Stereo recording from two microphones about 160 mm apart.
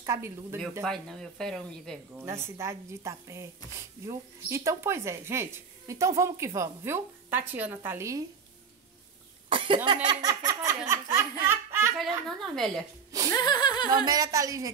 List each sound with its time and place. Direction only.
0.0 s speech: 15° right (ahead or behind)
0.8 s speech: 5° left (ahead or behind)
2.1 s speech: 15° right (ahead or behind)
9.5 s cough: 35° right (ahead or behind)
10.0 s speech: 25° right (ahead or behind)
12.0 s speech: centre (ahead or behind)
13.3 s chuckle: 25° left (ahead or behind)
14.0 s a woman's voice: 25° right (ahead or behind)